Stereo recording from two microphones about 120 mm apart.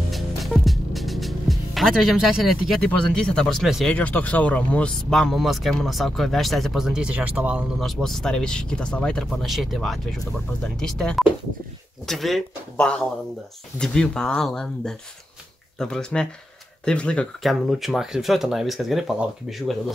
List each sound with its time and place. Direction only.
0.1 s music: centre (ahead or behind)
3.3 s speech: 5° left (ahead or behind)
3.9 s speech: 10° left (ahead or behind); by 7.6 s 10° right (ahead or behind)
7.8 s speech: centre (ahead or behind)